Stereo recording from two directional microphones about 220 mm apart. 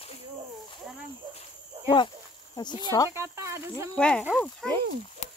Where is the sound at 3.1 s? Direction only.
10° right (ahead or behind).